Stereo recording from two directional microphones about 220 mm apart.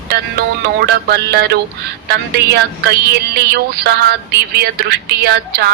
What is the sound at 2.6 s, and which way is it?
Music, 45° right (ahead or behind).